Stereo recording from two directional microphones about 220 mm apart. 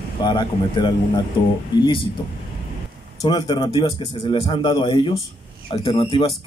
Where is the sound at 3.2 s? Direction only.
20° left (ahead or behind).